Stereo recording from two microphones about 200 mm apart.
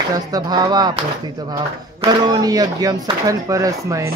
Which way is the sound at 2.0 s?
20° right (ahead or behind).